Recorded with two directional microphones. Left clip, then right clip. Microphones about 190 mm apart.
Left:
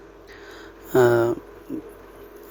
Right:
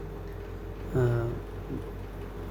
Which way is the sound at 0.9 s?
45° left (ahead or behind).